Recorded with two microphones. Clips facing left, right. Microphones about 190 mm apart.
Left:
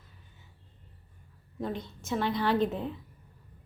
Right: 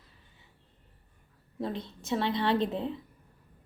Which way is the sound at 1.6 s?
30° right (ahead or behind).